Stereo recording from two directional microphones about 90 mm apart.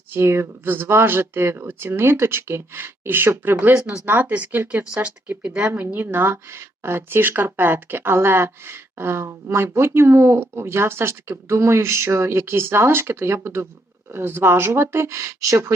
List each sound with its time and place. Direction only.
0.1 s speech: 30° right (ahead or behind)